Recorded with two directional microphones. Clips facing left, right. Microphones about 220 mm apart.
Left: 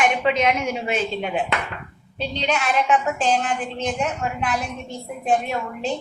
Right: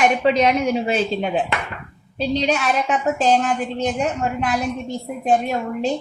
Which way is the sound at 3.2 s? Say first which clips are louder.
Right 4 dB; 40° right (ahead or behind).